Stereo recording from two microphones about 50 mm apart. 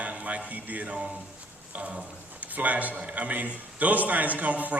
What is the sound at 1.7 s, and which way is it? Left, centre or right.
A man's voice, right.